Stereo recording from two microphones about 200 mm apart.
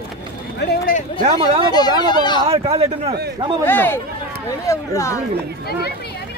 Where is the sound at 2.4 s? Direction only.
30° right (ahead or behind).